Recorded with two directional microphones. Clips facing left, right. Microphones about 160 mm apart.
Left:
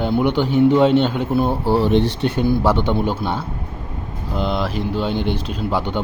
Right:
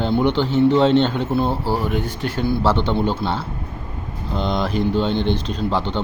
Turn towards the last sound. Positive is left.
turn(degrees=10)  # may be behind; listen again after turning